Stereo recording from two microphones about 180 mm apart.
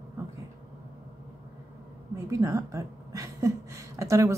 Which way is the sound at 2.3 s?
20° right (ahead or behind).